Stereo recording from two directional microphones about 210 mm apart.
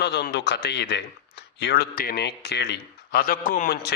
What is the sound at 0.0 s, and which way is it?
A man's voice, 55° left (ahead or behind).